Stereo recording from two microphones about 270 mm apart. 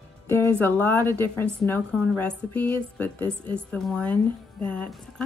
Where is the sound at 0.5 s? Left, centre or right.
Centre.